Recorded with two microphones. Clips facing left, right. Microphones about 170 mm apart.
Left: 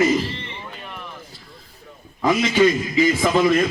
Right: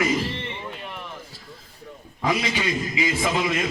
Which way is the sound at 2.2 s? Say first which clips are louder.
Left 8 dB; 45° left (ahead or behind).